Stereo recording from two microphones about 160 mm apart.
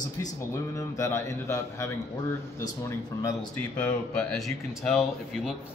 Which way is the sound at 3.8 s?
5° left (ahead or behind).